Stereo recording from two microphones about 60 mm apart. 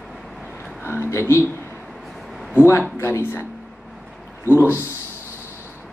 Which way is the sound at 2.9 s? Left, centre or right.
Left.